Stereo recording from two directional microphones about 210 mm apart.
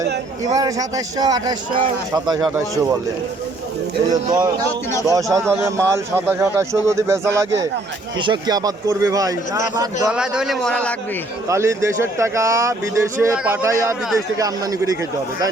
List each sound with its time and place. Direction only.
0.5 s speech: 15° right (ahead or behind)
4.1 s speech: 20° right (ahead or behind)
10.1 s a man's voice: 5° right (ahead or behind)
11.4 s speech: 15° right (ahead or behind)